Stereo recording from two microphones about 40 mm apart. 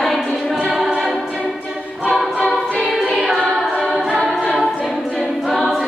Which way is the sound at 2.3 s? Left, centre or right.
Left.